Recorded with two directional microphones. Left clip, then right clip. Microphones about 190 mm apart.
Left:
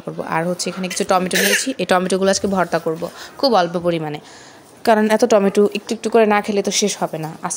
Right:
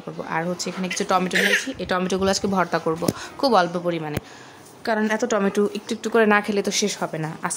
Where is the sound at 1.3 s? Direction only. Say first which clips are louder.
Left 3 dB; 50° left (ahead or behind).